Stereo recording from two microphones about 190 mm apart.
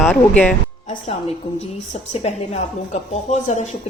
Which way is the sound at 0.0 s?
5° left (ahead or behind).